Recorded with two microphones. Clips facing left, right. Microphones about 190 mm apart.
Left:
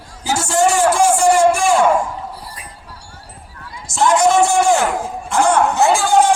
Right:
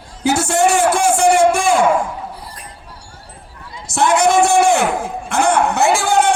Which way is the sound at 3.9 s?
60° right (ahead or behind).